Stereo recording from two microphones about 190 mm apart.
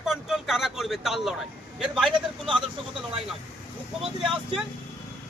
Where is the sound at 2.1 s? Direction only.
25° right (ahead or behind).